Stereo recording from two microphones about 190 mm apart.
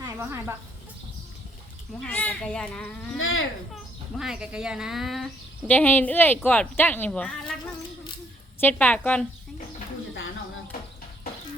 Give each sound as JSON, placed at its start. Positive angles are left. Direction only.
{"t": 0.0, "sound": "speech", "side_deg": -15}
{"t": 2.0, "sound": "speech", "side_deg": 10}
{"t": 3.2, "sound": "a child's voice", "side_deg": 90}
{"t": 4.2, "sound": "speech", "side_deg": -5}
{"t": 8.6, "sound": "speech", "side_deg": 10}